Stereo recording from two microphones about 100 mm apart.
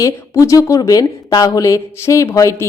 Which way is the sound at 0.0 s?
35° left (ahead or behind).